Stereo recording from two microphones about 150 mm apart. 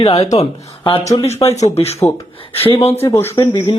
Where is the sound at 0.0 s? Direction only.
40° left (ahead or behind).